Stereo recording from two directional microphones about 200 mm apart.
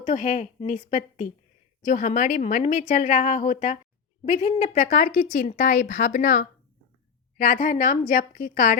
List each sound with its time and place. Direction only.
0.0 s a woman's voice: 35° left (ahead or behind)